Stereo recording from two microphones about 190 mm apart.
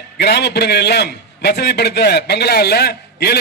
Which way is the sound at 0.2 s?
60° left (ahead or behind).